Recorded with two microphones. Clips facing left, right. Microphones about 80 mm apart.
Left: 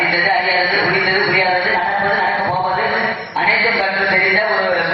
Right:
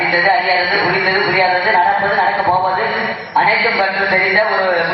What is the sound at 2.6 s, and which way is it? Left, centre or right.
Mantra, centre.